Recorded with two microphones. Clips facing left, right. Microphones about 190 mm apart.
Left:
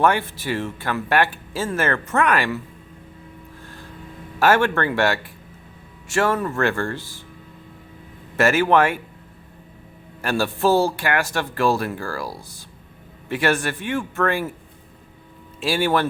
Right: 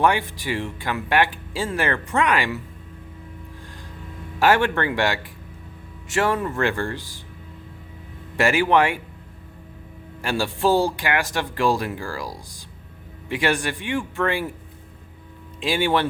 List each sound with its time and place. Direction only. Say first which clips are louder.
0.0 s speech: left 1 dB; 15° right (ahead or behind)
4.4 s speech: left 1 dB; 15° right (ahead or behind)
8.4 s speech: left 1 dB; 15° right (ahead or behind)
10.2 s speech: left 2 dB; 15° right (ahead or behind)
15.6 s speech: left 1 dB; 15° right (ahead or behind)